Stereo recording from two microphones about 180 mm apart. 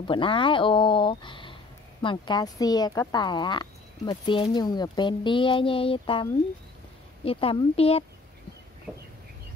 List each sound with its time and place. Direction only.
0.0 s speech: 30° left (ahead or behind)
7.2 s a woman's voice: 30° left (ahead or behind)